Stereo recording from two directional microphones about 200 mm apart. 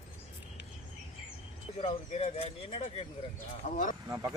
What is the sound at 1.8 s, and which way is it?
Speech, 30° left (ahead or behind).